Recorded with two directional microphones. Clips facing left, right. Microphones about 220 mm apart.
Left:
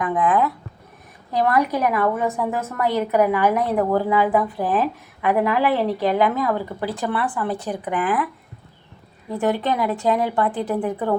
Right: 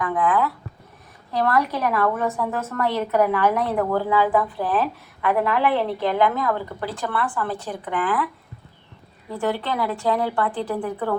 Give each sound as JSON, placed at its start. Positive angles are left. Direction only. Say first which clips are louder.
{"t": 0.0, "sound": "a woman's voice", "louder": "left 2 dB", "side_deg": 20}
{"t": 9.4, "sound": "a woman's voice", "louder": "left 3 dB", "side_deg": 20}